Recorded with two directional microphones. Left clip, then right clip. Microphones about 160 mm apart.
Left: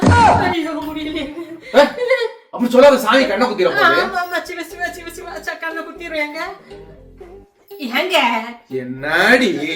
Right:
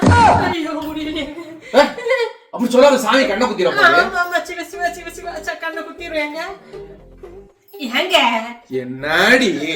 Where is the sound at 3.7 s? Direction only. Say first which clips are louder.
Right 4 dB; 10° left (ahead or behind).